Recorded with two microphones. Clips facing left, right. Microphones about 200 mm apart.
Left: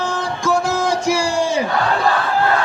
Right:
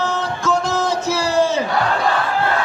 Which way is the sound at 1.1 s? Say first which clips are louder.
Right 2 dB; 15° left (ahead or behind).